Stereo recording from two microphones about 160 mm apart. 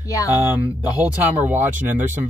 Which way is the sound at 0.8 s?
10° right (ahead or behind).